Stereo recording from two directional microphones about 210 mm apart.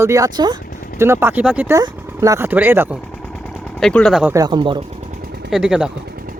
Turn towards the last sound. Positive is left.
turn(degrees=-5)  # may be behind; listen again after turning